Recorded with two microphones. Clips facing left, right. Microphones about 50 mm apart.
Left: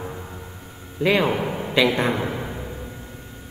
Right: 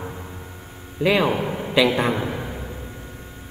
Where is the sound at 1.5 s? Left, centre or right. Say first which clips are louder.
Right 1 dB; centre.